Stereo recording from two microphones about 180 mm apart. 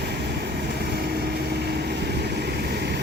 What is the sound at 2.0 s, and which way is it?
Vehicle, 65° right (ahead or behind).